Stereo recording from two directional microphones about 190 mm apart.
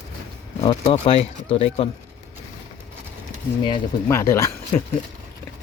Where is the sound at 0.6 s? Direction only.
30° left (ahead or behind).